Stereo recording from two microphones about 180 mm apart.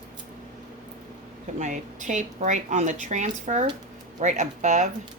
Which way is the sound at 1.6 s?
40° right (ahead or behind).